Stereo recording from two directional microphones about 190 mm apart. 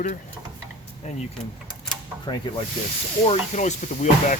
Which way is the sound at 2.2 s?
25° left (ahead or behind).